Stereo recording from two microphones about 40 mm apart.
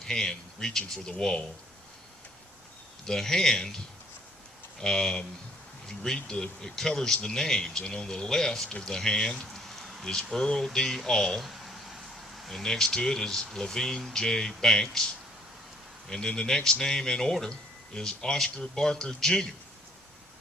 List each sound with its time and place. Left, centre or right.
0.0 s speech: centre
3.1 s speech: centre
4.8 s speech: centre
9.6 s a sound: centre
10.3 s speech: centre
11.3 s a sound: centre
12.5 s speech: centre